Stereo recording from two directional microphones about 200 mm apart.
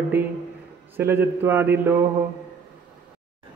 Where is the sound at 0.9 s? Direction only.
10° right (ahead or behind).